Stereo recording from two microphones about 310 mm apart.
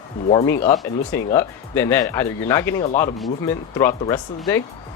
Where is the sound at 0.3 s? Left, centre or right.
Centre.